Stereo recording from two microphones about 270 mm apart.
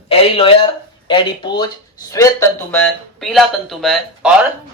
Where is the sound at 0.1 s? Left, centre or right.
Centre.